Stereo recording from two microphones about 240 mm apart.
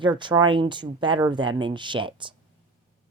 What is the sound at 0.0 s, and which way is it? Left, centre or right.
Speech, centre.